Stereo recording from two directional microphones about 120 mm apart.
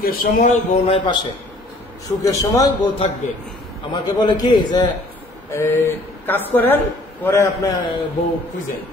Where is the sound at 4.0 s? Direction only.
35° left (ahead or behind).